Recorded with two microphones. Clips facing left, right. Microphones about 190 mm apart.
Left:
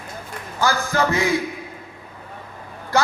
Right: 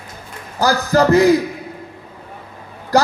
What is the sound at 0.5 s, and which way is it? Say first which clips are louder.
Speech: right 6 dB; 35° right (ahead or behind).